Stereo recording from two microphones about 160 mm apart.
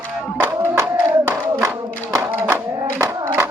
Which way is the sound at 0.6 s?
15° right (ahead or behind).